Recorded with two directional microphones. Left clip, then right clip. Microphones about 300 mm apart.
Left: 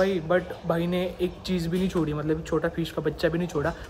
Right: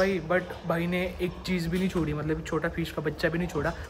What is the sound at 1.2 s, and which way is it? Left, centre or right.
Speech, centre.